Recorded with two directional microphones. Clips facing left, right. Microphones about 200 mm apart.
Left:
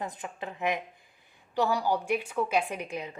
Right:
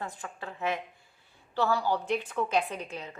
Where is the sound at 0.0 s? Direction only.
20° left (ahead or behind).